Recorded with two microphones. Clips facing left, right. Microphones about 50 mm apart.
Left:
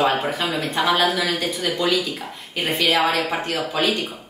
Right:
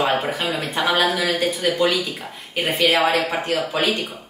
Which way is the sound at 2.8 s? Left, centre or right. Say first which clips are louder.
Right 2 dB; right.